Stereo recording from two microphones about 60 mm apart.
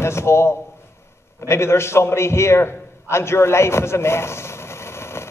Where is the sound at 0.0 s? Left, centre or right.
Left.